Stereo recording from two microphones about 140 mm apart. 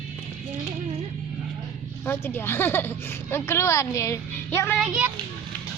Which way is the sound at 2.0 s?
15° left (ahead or behind).